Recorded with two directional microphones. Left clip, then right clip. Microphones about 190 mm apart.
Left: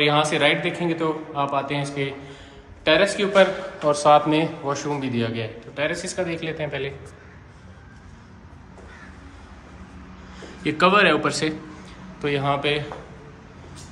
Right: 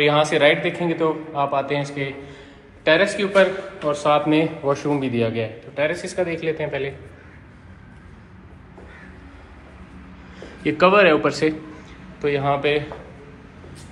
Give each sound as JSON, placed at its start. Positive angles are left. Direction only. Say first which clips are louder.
{"t": 0.0, "sound": "speech", "louder": "right 3 dB", "side_deg": 15}
{"t": 4.6, "sound": "speech", "louder": "right 4 dB", "side_deg": 0}
{"t": 10.3, "sound": "a man's voice", "louder": "right 2 dB", "side_deg": 10}